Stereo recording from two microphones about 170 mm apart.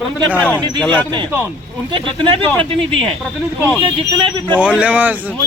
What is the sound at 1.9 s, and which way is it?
Speech, 30° right (ahead or behind).